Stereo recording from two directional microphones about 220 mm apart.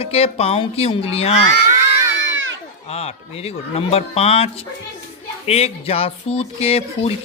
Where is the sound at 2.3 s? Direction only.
60° right (ahead or behind).